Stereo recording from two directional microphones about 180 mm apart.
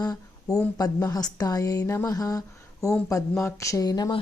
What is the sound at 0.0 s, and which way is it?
Speech, 20° left (ahead or behind).